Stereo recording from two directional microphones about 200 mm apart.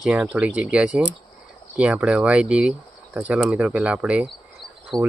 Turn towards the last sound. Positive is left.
turn(degrees=0)  # may be behind; listen again after turning